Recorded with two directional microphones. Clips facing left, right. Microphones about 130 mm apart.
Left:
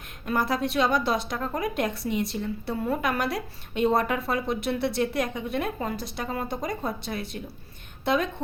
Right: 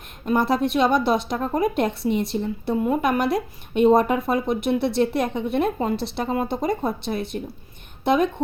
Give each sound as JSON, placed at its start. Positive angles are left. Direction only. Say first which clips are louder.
{"t": 0.3, "sound": "a woman's voice", "louder": "right 6 dB", "side_deg": -25}